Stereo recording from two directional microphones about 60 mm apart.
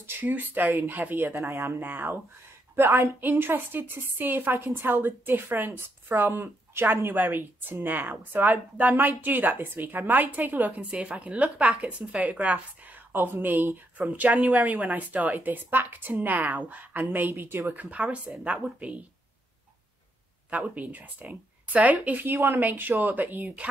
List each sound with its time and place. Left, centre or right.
0.0 s a woman's voice: right
1.4 s speech: right
1.8 s a woman's voice: right
2.7 s a woman's voice: right
3.2 s a woman's voice: right
13.1 s a woman's voice: right
14.3 s speech: right
17.3 s a woman's voice: right
17.8 s speech: right
20.4 s speech: right